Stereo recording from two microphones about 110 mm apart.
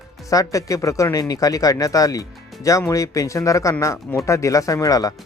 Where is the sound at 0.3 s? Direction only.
30° left (ahead or behind).